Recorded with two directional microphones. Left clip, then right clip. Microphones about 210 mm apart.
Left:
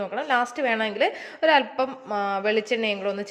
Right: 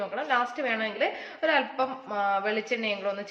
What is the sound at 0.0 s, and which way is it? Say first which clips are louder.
A woman's voice: left 3 dB; 45° left (ahead or behind).